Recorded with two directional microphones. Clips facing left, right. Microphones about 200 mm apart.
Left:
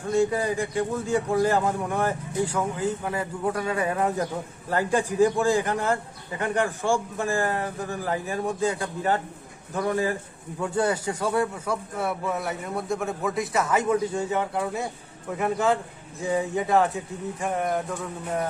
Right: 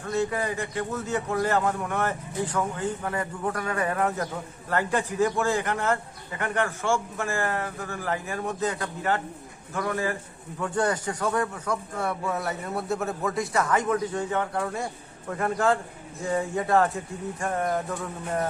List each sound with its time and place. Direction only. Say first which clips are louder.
0.0 s a man's voice: left 4 dB; 15° left (ahead or behind)
3.5 s a man's voice: left 2 dB; 20° left (ahead or behind)
15.3 s music: left 1 dB; 5° left (ahead or behind)